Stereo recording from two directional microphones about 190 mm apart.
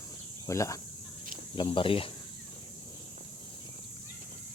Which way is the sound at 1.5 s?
25° left (ahead or behind).